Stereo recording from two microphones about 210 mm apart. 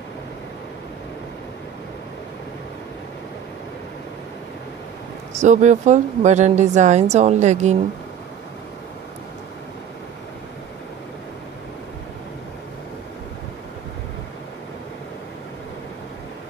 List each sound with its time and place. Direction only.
5.3 s speech: 35° right (ahead or behind)